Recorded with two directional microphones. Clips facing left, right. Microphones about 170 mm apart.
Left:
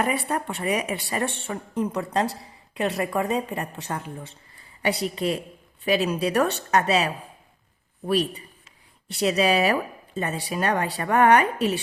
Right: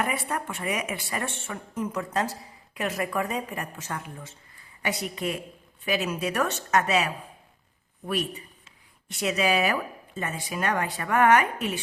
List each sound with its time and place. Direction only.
0.3 s speech: 35° left (ahead or behind)